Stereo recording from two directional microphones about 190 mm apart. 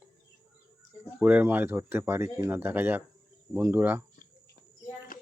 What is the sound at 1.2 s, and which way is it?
Speech, 10° right (ahead or behind).